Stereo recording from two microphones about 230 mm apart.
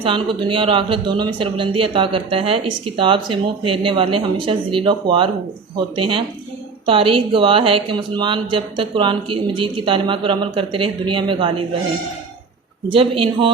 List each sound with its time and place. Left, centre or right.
0.0 s speech: right
12.9 s speech: right